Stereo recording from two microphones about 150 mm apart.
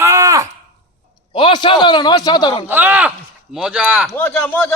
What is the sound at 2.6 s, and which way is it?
A man's voice, 15° right (ahead or behind).